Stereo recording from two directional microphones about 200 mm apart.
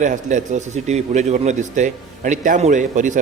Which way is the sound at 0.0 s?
40° right (ahead or behind).